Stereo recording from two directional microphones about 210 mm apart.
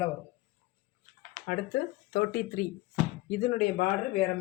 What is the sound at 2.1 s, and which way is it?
Speech, 45° left (ahead or behind).